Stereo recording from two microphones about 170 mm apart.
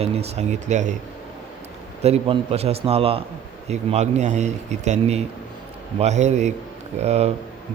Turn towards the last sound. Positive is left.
turn(degrees=-40)  # may be behind; listen again after turning